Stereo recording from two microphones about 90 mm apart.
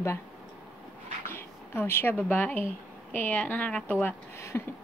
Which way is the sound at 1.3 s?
25° left (ahead or behind).